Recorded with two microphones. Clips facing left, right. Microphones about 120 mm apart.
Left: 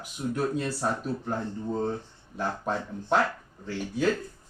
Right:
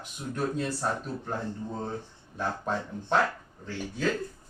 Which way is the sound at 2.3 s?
5° left (ahead or behind).